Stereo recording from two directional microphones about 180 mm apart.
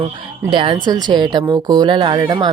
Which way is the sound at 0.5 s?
30° right (ahead or behind).